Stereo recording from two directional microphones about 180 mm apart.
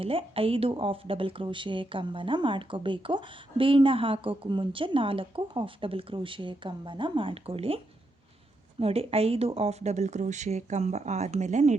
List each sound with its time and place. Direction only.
0.0 s speech: 30° right (ahead or behind)
8.8 s speech: 35° right (ahead or behind)